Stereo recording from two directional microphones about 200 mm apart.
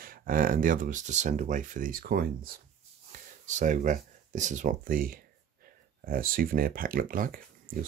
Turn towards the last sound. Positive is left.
turn(degrees=-45)  # may be behind; listen again after turning